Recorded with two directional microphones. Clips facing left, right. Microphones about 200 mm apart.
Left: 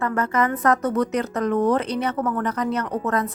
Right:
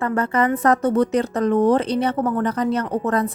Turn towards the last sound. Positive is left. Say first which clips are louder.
# right 3 dB
turn(degrees=-30)  # may be behind; listen again after turning